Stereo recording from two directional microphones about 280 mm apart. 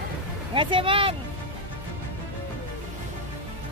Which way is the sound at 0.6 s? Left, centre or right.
Centre.